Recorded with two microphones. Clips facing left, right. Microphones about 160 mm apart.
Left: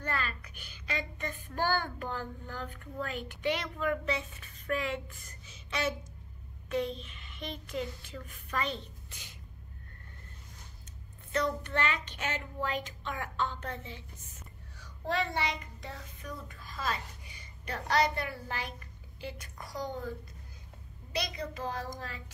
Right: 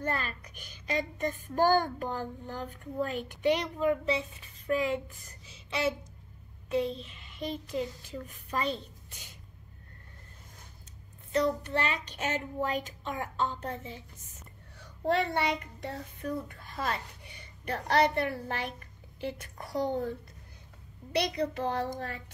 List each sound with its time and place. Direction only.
0.4 s a child's voice: 40° right (ahead or behind)
2.0 s speech: 15° right (ahead or behind)
3.1 s a child's voice: 40° right (ahead or behind)
3.7 s a woman's voice: 25° right (ahead or behind)
11.3 s a child's voice: 35° right (ahead or behind)
14.8 s a child's voice: 55° right (ahead or behind)
21.1 s a child's voice: 65° right (ahead or behind)